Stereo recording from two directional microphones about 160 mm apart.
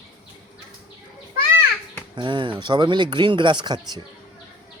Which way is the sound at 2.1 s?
30° right (ahead or behind).